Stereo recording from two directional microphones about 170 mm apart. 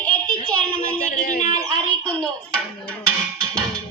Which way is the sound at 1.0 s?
50° left (ahead or behind).